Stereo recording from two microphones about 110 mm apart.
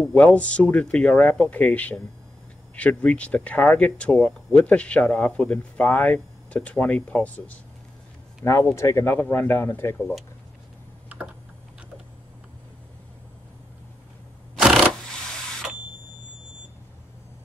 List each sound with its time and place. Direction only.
0.0 s speech: 10° left (ahead or behind)
8.5 s speech: 25° left (ahead or behind)
14.5 s a sound: 5° right (ahead or behind)